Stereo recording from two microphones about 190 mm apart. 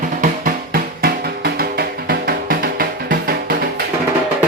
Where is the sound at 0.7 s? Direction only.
55° right (ahead or behind).